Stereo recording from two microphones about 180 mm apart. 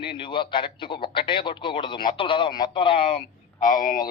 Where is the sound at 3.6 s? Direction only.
50° left (ahead or behind).